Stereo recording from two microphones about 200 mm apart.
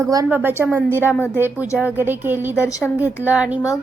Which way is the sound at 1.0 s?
10° left (ahead or behind).